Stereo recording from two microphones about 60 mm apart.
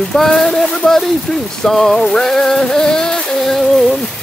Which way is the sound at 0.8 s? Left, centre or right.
Centre.